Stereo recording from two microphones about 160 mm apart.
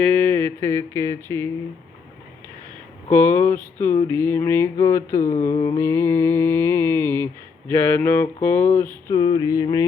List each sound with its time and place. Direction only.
0.0 s a sound: 10° left (ahead or behind)
3.1 s mantra: 10° left (ahead or behind)
9.1 s music: 30° left (ahead or behind)